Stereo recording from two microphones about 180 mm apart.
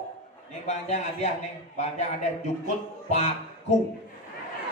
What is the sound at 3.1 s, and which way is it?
Speech, 40° left (ahead or behind).